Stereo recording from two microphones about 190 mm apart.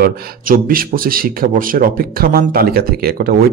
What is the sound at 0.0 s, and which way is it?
A man's voice, 50° right (ahead or behind).